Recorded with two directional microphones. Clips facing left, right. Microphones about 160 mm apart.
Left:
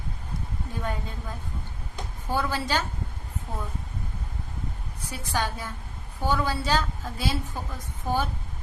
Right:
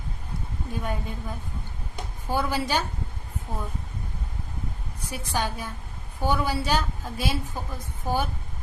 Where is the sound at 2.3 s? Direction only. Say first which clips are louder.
Right 1 dB; 15° right (ahead or behind).